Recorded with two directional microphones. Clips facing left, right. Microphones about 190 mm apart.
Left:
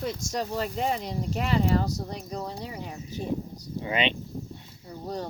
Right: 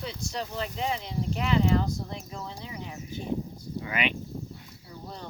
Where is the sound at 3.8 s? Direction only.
25° left (ahead or behind).